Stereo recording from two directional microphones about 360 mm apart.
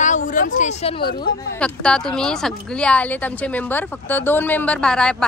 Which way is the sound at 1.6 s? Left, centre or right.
Centre.